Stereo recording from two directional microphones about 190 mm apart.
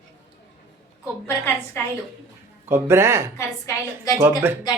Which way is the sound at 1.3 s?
10° left (ahead or behind).